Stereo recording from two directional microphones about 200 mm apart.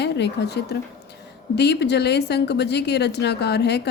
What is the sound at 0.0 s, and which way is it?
A woman's voice, 55° left (ahead or behind).